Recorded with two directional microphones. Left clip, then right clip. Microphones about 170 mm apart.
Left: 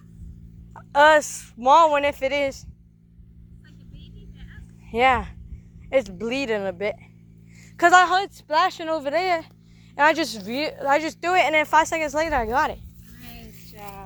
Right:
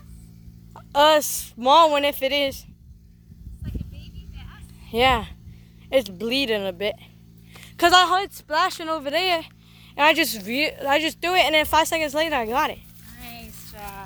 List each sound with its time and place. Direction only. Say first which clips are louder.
0.7 s a sound: left 1 dB; 5° right (ahead or behind)
1.3 s speech: left 1 dB; 25° right (ahead or behind)
3.6 s vehicle: right 10 dB; 40° right (ahead or behind)
4.9 s speech: even; 20° right (ahead or behind); by 9.1 s centre (ahead or behind)
9.1 s speech: right 2 dB; 15° right (ahead or behind)